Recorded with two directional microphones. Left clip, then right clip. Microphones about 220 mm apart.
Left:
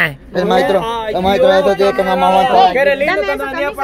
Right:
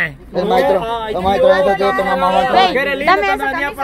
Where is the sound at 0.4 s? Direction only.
50° left (ahead or behind).